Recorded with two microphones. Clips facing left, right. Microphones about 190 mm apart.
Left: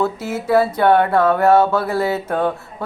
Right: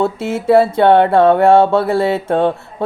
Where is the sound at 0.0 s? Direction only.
25° right (ahead or behind).